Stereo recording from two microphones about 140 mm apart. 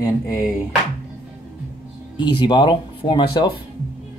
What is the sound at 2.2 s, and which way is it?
Speech, 35° left (ahead or behind).